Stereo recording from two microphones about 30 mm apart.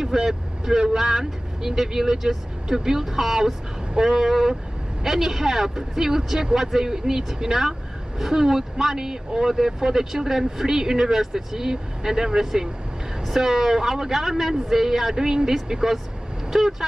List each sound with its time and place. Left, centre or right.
0.0 s speech: centre